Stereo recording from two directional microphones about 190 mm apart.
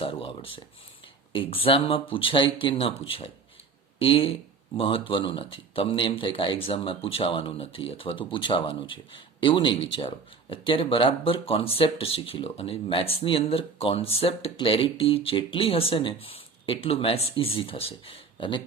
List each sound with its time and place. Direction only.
0.0 s speech: 30° left (ahead or behind)